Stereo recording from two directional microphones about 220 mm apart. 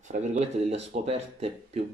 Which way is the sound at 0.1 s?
30° right (ahead or behind).